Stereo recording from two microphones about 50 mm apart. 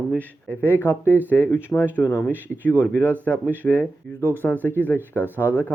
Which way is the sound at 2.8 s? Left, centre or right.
Left.